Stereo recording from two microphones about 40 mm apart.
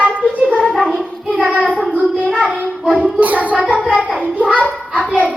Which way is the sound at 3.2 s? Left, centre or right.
Right.